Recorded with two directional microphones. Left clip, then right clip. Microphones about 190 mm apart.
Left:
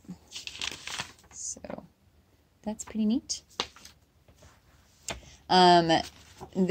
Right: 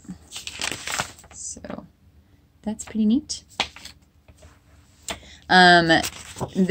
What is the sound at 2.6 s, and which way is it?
Speech, 25° left (ahead or behind).